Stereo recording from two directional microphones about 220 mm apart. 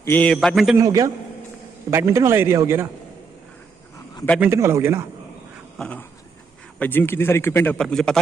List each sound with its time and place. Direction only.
0.0 s a man's voice: 10° left (ahead or behind)
0.7 s a man's voice: 15° right (ahead or behind)
4.4 s a man's voice: 10° right (ahead or behind)
5.8 s a sound: 5° left (ahead or behind)
6.8 s a man's voice: 10° left (ahead or behind)